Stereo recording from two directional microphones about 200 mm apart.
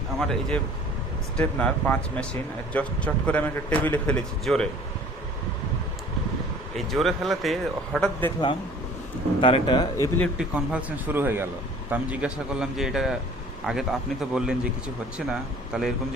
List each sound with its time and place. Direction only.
0.2 s speech: centre (ahead or behind)
6.7 s speech: centre (ahead or behind)
9.4 s speech: 25° left (ahead or behind)
10.3 s speech: 5° right (ahead or behind)